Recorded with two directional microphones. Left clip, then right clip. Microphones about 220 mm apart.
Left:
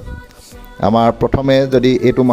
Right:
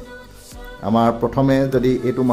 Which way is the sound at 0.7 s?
40° left (ahead or behind).